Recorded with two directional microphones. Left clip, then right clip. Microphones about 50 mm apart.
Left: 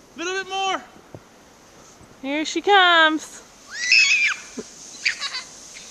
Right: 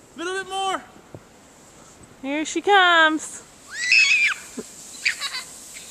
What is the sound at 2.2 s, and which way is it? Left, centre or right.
Speech, left.